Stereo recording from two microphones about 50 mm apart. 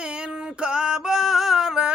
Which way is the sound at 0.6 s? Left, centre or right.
Centre.